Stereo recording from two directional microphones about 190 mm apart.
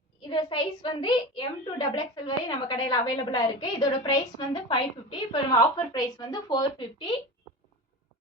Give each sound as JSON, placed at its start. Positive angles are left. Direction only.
{"t": 0.3, "sound": "a woman's voice", "side_deg": 25}